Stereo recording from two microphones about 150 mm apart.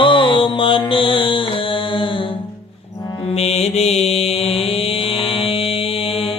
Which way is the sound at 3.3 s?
45° left (ahead or behind).